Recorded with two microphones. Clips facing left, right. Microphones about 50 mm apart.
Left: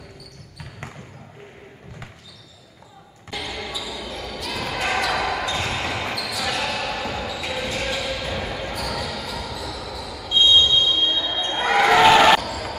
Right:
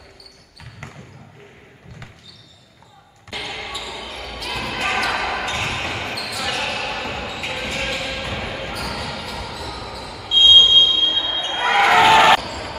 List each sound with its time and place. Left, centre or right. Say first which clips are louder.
3.4 s basketball bounce: right 1 dB; right
9.9 s a sound: even; right
10.4 s basketball bounce: right 5 dB; right
12.0 s basketball bounce: right 1 dB; centre